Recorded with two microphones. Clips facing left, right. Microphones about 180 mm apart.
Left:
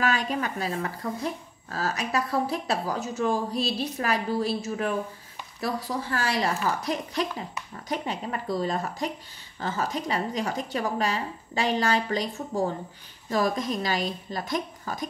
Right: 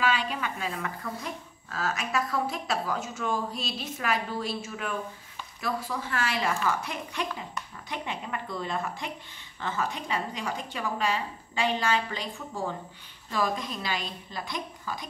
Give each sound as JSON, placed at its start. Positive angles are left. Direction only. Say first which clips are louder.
{"t": 0.0, "sound": "a woman's voice", "louder": "left 2 dB", "side_deg": 45}